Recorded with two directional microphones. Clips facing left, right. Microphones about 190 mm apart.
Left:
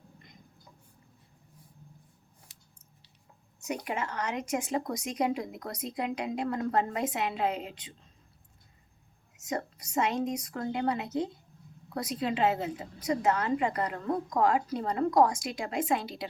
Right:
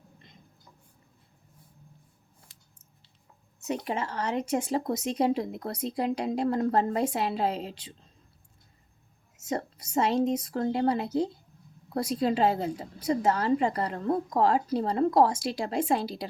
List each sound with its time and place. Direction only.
3.7 s speech: 30° right (ahead or behind)
9.5 s speech: 30° right (ahead or behind)